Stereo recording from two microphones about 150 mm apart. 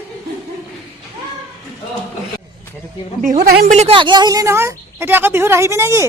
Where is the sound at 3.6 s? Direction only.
45° right (ahead or behind).